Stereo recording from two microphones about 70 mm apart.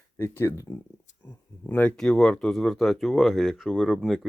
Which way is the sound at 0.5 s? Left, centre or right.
Left.